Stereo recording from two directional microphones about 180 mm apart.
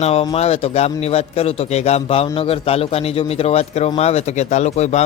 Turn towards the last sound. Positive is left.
turn(degrees=40)  # may be behind; listen again after turning